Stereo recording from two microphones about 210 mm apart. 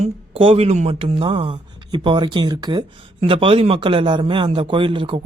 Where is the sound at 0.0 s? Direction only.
25° right (ahead or behind).